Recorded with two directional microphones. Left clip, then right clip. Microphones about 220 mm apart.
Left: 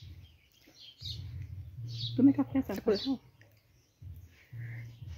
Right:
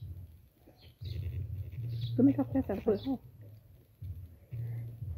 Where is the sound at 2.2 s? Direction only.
45° left (ahead or behind).